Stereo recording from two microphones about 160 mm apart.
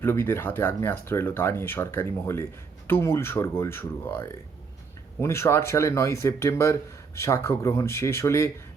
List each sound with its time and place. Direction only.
0.0 s speech: 15° left (ahead or behind)